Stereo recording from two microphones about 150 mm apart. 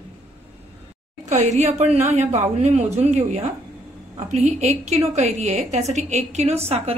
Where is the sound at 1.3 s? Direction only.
50° right (ahead or behind).